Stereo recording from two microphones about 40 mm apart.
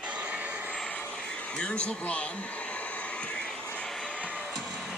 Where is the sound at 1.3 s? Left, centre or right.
Left.